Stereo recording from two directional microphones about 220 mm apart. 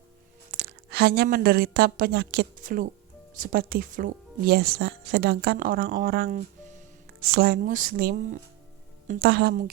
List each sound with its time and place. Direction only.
0.6 s a woman's voice: 45° right (ahead or behind)